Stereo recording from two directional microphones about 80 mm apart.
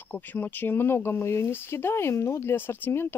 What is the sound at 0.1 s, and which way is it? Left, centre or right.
Speech, left.